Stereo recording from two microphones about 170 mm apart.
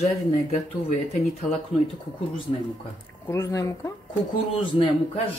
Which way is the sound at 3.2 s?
15° left (ahead or behind).